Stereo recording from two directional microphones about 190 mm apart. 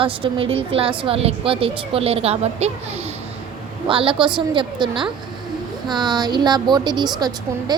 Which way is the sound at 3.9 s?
25° right (ahead or behind).